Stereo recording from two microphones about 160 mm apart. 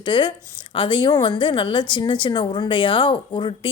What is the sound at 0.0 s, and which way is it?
A woman's voice, 30° left (ahead or behind).